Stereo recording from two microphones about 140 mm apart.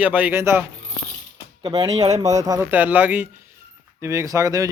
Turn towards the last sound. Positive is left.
turn(degrees=-25)  # may be behind; listen again after turning